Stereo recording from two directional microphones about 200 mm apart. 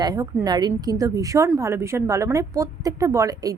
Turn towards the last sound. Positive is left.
turn(degrees=-15)  # may be behind; listen again after turning